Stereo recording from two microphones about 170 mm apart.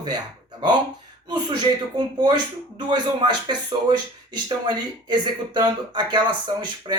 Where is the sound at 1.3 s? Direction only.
25° right (ahead or behind).